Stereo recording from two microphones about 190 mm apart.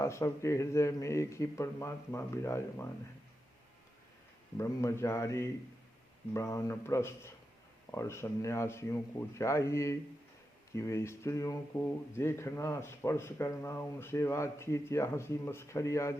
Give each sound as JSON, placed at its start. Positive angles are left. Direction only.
{"t": 0.0, "sound": "speech", "side_deg": 15}
{"t": 4.5, "sound": "speech", "side_deg": 15}